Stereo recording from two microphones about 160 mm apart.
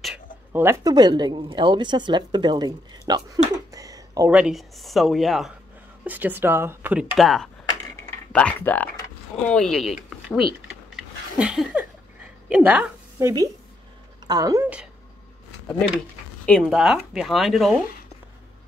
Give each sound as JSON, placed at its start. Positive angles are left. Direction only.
{"t": 0.5, "sound": "speech", "side_deg": -15}
{"t": 0.9, "sound": "a woman's voice", "side_deg": -25}
{"t": 4.3, "sound": "speech", "side_deg": -5}
{"t": 6.0, "sound": "speech", "side_deg": -10}
{"t": 13.2, "sound": "a woman's voice", "side_deg": -20}
{"t": 16.4, "sound": "speech", "side_deg": 0}